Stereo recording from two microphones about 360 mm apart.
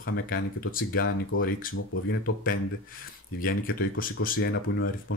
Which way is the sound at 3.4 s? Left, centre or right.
Left.